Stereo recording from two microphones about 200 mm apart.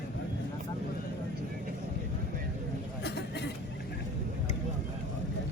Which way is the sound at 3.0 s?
55° left (ahead or behind).